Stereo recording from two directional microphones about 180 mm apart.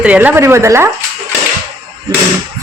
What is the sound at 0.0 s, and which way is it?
Speech, 10° right (ahead or behind).